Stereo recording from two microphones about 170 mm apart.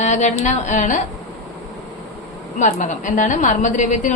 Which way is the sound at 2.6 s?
45° left (ahead or behind).